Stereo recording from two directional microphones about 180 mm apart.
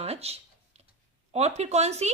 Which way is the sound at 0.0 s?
35° right (ahead or behind).